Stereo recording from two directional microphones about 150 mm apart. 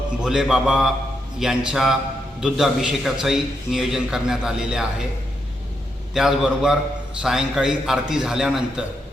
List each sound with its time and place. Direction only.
0.2 s a man's voice: 5° right (ahead or behind)
6.1 s a man's voice: 5° right (ahead or behind)